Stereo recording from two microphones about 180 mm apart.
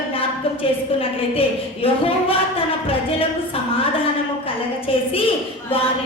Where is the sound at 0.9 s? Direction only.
30° left (ahead or behind).